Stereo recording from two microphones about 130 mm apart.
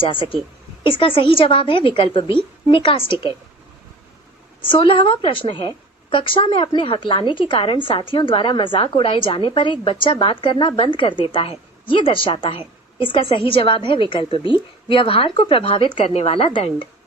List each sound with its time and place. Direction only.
0.0 s a woman's voice: 40° left (ahead or behind)
4.7 s a woman's voice: 40° left (ahead or behind)